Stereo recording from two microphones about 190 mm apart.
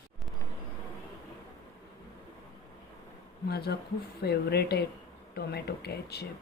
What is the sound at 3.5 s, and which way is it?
Speech, 55° left (ahead or behind).